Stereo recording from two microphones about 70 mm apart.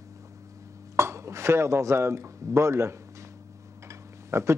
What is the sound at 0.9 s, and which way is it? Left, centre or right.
Speech, right.